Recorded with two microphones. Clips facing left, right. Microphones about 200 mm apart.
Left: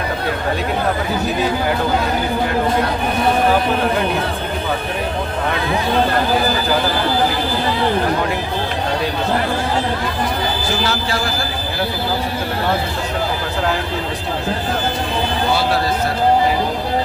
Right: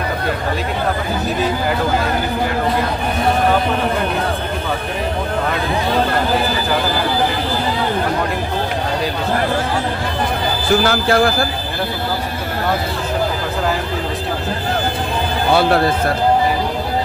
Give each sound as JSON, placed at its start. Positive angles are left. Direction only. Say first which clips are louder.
{"t": 10.8, "sound": "a man's voice", "louder": "right 6 dB", "side_deg": -55}